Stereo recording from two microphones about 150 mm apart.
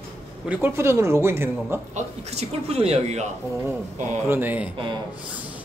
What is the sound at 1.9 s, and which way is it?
A man's voice, 45° right (ahead or behind).